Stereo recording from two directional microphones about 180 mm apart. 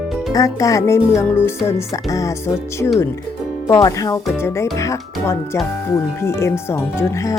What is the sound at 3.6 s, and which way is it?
Speech, 15° left (ahead or behind).